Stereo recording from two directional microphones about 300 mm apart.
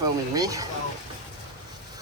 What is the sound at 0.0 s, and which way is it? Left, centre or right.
Speech, centre.